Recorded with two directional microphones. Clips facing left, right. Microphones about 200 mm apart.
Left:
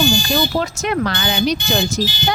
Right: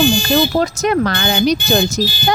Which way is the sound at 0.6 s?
40° right (ahead or behind).